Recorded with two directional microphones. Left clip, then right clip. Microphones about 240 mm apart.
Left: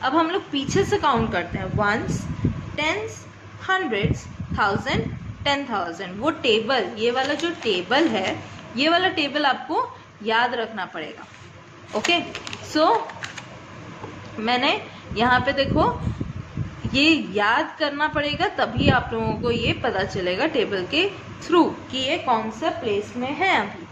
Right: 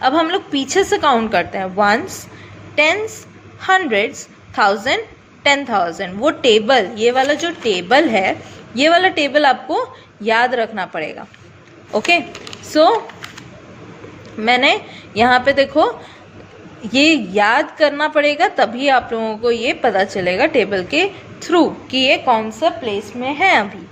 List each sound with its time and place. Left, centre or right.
0.0 s a woman's voice: right
14.4 s a woman's voice: right
16.9 s a woman's voice: right